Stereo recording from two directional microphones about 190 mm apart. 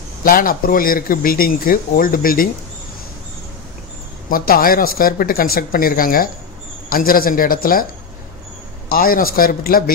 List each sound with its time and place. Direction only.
0.2 s speech: 50° left (ahead or behind)
4.3 s speech: 50° left (ahead or behind)
8.9 s speech: 50° left (ahead or behind)